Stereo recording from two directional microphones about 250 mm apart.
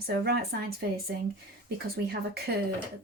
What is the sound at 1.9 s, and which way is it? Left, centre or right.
Speech, right.